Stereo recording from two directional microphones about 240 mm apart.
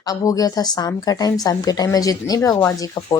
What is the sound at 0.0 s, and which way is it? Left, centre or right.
A woman's voice, centre.